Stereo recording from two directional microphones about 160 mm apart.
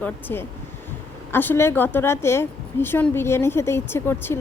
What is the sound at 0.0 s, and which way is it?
A woman's voice, 10° left (ahead or behind).